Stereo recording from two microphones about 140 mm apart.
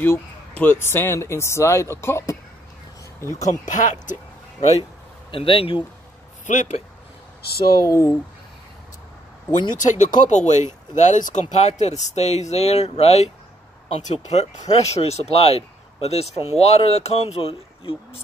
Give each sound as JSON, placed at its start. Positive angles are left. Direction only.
{"t": 0.0, "sound": "speech", "side_deg": 15}
{"t": 3.4, "sound": "speech", "side_deg": 65}
{"t": 5.3, "sound": "speech", "side_deg": 40}
{"t": 6.4, "sound": "speech", "side_deg": 60}
{"t": 7.8, "sound": "speech", "side_deg": 20}
{"t": 9.5, "sound": "speech", "side_deg": 60}
{"t": 11.5, "sound": "speech", "side_deg": 55}